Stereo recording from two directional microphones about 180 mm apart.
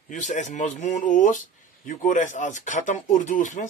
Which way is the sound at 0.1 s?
40° left (ahead or behind).